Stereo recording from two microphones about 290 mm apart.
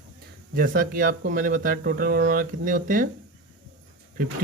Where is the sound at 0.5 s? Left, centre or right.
Right.